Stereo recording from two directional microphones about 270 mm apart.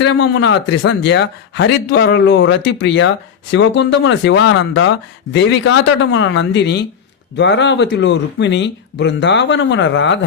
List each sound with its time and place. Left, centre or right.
0.0 s speech: left